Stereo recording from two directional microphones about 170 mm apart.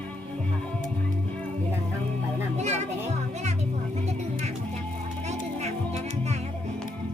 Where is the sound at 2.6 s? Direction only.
40° right (ahead or behind).